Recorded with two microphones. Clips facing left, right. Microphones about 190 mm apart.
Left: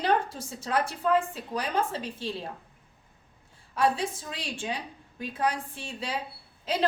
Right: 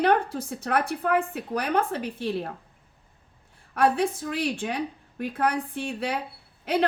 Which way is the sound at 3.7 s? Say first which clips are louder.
Right 4 dB; 60° right (ahead or behind).